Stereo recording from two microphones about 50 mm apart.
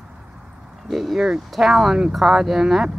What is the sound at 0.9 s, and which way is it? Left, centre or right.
Speech, centre.